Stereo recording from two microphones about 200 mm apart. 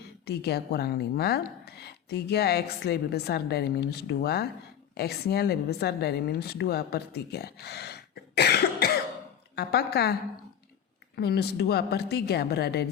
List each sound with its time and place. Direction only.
0.3 s a woman's voice: 55° left (ahead or behind)
11.2 s a woman's voice: 55° left (ahead or behind)